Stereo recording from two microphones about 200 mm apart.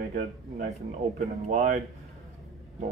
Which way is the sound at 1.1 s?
35° right (ahead or behind).